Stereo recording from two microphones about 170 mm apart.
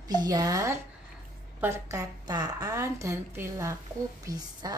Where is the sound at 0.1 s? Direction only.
25° right (ahead or behind).